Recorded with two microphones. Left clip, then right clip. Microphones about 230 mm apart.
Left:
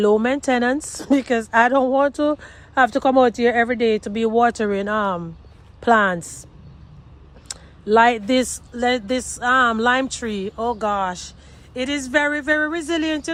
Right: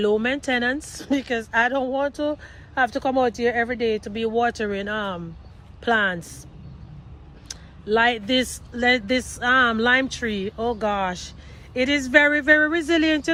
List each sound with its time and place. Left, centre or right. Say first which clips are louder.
0.0 s speech: left 4 dB; centre
7.4 s a sound: left 4 dB; left
8.3 s speech: left 3 dB; centre